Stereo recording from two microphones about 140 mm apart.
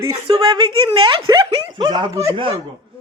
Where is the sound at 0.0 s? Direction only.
25° right (ahead or behind).